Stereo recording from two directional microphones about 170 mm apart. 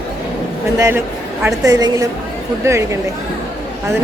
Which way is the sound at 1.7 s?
20° right (ahead or behind).